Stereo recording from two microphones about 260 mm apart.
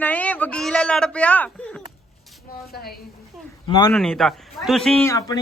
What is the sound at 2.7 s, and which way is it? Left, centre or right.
Speech, left.